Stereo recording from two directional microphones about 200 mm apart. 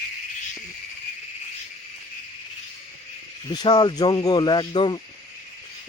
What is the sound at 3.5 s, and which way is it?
Speech, 20° left (ahead or behind).